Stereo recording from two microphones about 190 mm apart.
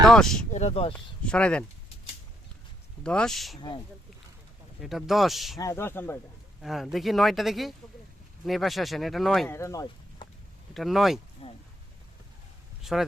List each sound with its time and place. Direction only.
0.0 s speech: centre (ahead or behind)
0.5 s speech: 35° left (ahead or behind)
1.2 s speech: 5° left (ahead or behind)
3.0 s speech: 5° left (ahead or behind)
4.8 s speech: centre (ahead or behind)
5.5 s speech: 15° left (ahead or behind)
6.6 s speech: centre (ahead or behind)
9.5 s speech: 15° left (ahead or behind)
10.8 s speech: centre (ahead or behind)
11.4 s a sound: 30° left (ahead or behind)
12.8 s speech: centre (ahead or behind)